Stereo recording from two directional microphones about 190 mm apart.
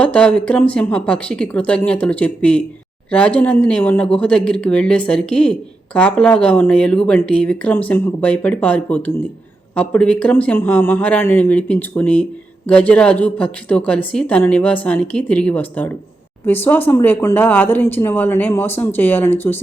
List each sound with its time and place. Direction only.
0.0 s speech: 5° left (ahead or behind)